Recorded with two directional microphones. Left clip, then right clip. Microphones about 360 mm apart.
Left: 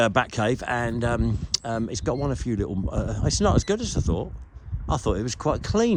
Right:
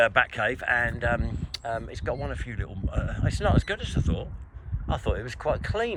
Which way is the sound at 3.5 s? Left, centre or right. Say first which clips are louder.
Left 4 dB; centre.